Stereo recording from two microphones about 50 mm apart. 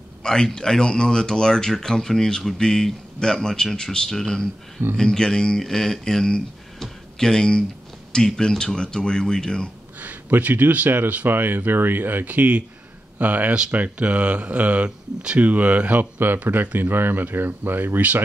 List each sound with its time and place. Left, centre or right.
0.2 s speech: centre
9.9 s speech: right